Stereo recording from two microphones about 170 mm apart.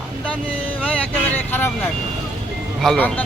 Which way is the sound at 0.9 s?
10° left (ahead or behind).